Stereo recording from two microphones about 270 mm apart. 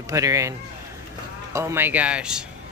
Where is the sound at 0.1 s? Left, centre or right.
Centre.